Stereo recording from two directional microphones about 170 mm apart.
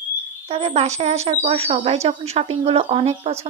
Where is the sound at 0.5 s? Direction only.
35° right (ahead or behind).